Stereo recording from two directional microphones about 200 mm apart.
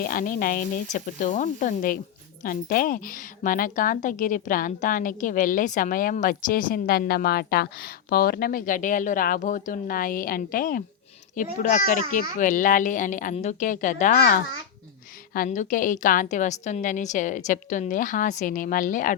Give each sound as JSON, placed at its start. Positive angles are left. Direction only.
{"t": 0.0, "sound": "a woman's voice", "side_deg": 45}